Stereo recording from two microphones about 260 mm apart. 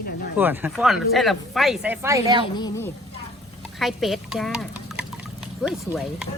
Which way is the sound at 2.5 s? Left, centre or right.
Centre.